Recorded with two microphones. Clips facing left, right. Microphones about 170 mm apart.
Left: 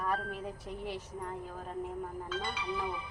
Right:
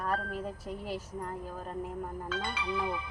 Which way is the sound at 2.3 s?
90° right.